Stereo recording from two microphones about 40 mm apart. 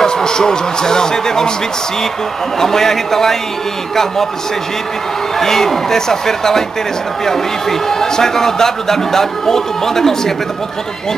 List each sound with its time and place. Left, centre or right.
0.0 s a man's voice: centre
2.6 s a man's voice: centre
5.4 s a man's voice: centre
7.9 s a man's voice: centre